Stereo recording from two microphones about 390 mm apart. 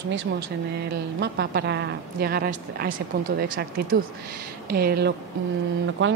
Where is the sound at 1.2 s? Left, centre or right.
Right.